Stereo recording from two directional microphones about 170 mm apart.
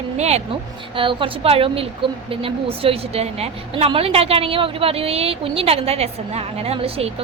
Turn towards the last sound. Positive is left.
turn(degrees=-35)  # may be behind; listen again after turning